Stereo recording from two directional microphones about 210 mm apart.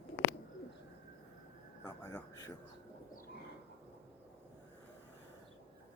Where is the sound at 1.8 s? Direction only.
15° left (ahead or behind).